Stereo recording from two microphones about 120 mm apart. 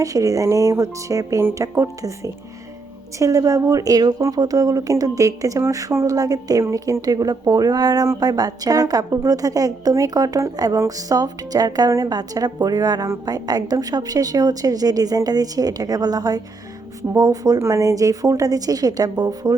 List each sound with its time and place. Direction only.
0.0 s a woman's voice: 30° right (ahead or behind)